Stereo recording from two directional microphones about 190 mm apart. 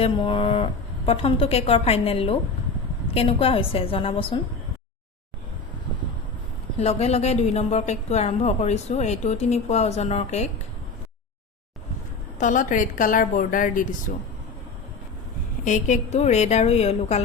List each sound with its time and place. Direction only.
0.0 s a woman's voice: 30° left (ahead or behind)
6.7 s a woman's voice: 35° left (ahead or behind)
12.4 s a woman's voice: 40° left (ahead or behind)
15.6 s a woman's voice: 40° left (ahead or behind)